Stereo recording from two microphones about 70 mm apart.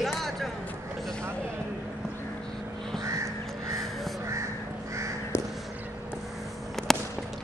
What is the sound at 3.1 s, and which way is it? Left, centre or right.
Crow, right.